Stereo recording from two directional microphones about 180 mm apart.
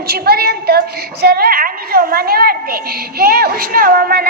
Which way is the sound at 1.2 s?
60° right (ahead or behind).